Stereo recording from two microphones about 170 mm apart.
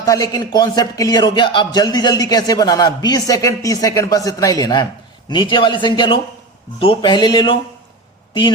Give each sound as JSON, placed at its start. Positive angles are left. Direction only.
{"t": 0.0, "sound": "a man's voice", "side_deg": 20}